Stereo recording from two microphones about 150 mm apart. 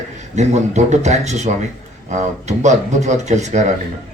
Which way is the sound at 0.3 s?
50° right (ahead or behind).